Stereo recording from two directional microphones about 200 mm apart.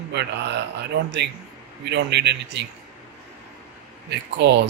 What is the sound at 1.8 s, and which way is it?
Speech, 55° right (ahead or behind).